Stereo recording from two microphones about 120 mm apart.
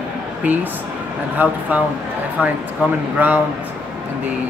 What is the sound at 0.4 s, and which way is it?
Speech, 15° right (ahead or behind).